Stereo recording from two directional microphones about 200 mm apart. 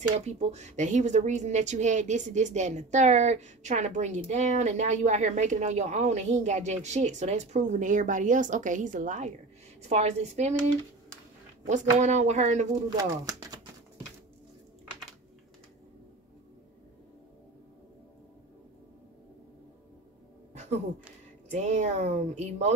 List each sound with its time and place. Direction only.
0.2 s speech: 35° right (ahead or behind)
11.6 s speech: 35° right (ahead or behind)
12.9 s speech: 20° right (ahead or behind)
20.5 s a sound: 35° right (ahead or behind)
21.5 s speech: 35° right (ahead or behind)